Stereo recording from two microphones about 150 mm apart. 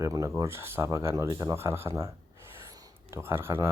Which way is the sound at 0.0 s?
20° right (ahead or behind).